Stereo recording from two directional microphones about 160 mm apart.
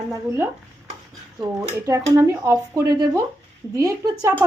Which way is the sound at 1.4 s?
20° right (ahead or behind).